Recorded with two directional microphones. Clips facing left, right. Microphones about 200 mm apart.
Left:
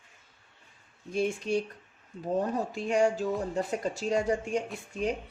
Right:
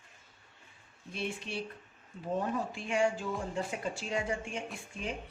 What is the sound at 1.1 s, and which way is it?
A woman's voice, 45° left (ahead or behind).